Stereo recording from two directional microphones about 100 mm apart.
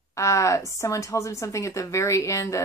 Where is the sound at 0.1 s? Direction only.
30° left (ahead or behind).